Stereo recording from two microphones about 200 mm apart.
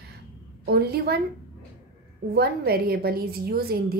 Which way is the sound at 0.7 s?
55° right (ahead or behind).